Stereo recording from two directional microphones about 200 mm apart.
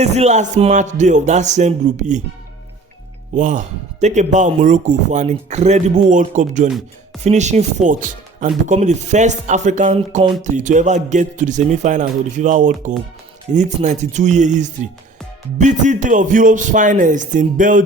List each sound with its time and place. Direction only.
0.0 s speech: 35° right (ahead or behind)
3.3 s speech: 40° right (ahead or behind)